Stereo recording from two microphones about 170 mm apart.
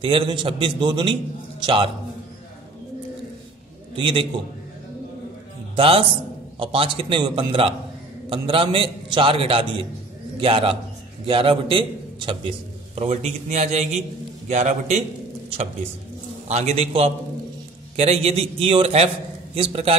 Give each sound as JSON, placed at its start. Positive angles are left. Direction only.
{"t": 0.0, "sound": "a man's voice", "side_deg": -30}
{"t": 3.9, "sound": "a man's voice", "side_deg": -30}
{"t": 5.8, "sound": "a man's voice", "side_deg": -30}
{"t": 16.4, "sound": "a man's voice", "side_deg": -40}